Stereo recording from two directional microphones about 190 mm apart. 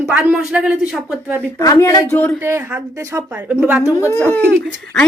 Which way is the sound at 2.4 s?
15° right (ahead or behind).